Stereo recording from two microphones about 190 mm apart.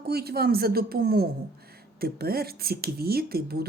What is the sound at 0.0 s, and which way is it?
A woman's voice, 55° right (ahead or behind).